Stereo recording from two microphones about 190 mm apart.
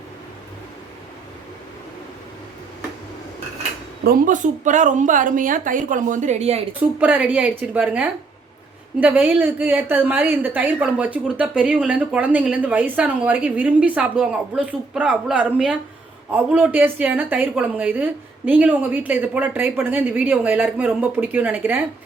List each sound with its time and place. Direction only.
4.0 s a woman's voice: 45° right (ahead or behind)
7.0 s speech: 10° right (ahead or behind)